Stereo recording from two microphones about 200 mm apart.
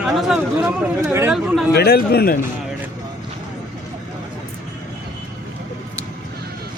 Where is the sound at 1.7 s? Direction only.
50° left (ahead or behind).